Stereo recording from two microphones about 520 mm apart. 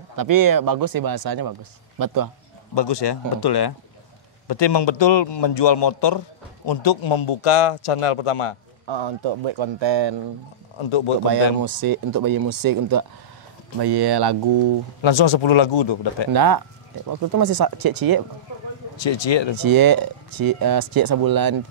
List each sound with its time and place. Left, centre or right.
0.1 s speech: right
2.7 s a man's voice: left
8.8 s speech: right
10.8 s a man's voice: left
11.2 s speech: right
15.0 s speech: left
16.3 s speech: right
19.0 s speech: left
19.6 s speech: right